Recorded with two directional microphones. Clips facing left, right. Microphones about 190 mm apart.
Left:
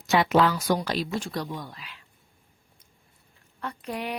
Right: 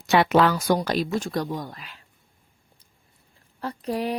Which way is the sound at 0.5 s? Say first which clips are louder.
Right 3 dB; 45° right (ahead or behind).